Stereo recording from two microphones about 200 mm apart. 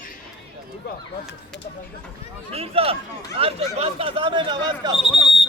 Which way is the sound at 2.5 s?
30° right (ahead or behind).